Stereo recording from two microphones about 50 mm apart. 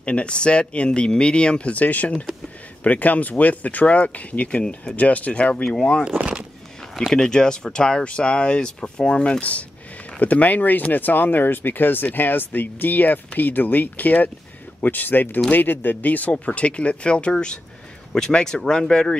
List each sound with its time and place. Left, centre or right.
0.0 s speech: left
6.1 s speech: right
7.1 s speech: centre